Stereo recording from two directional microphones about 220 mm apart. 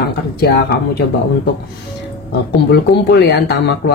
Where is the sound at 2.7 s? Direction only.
50° left (ahead or behind).